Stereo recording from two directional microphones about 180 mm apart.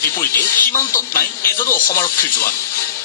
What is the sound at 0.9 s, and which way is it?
Speech, 15° left (ahead or behind).